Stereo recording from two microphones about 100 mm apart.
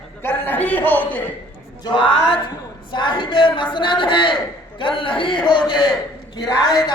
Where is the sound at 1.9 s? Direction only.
55° left (ahead or behind).